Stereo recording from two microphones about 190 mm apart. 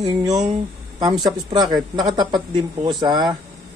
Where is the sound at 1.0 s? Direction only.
20° right (ahead or behind).